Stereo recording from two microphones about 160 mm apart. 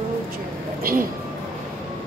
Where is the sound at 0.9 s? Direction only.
65° right (ahead or behind).